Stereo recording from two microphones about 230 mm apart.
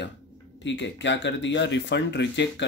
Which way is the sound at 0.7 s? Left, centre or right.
Left.